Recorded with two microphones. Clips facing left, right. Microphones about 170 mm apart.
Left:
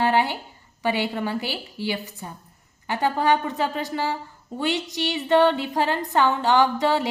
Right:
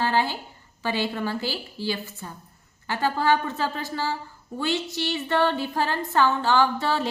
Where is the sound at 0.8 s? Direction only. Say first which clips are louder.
Left 2 dB; 15° left (ahead or behind).